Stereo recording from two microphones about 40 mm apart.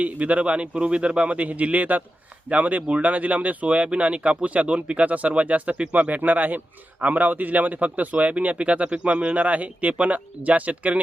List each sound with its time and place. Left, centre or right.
0.0 s speech: right